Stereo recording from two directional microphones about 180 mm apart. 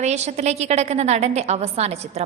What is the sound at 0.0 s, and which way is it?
A woman's voice, 40° right (ahead or behind).